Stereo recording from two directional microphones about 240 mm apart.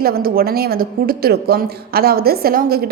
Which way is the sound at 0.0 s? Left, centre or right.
Right.